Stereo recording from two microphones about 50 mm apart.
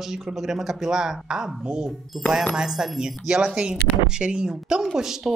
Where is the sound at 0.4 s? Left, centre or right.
Centre.